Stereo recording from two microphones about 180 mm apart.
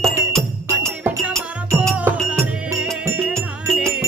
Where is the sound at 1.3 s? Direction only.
5° right (ahead or behind).